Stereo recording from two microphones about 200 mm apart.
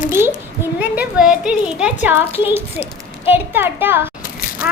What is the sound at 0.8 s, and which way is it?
A woman's voice, 5° right (ahead or behind).